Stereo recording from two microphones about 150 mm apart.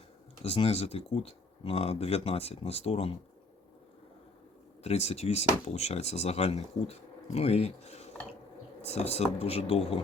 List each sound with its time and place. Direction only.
0.4 s speech: 40° left (ahead or behind)
4.8 s speech: 45° left (ahead or behind)